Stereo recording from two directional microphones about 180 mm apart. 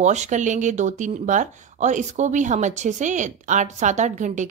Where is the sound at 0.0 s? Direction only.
40° right (ahead or behind).